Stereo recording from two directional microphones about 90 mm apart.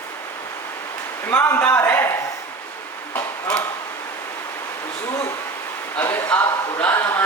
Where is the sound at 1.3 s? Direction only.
25° left (ahead or behind).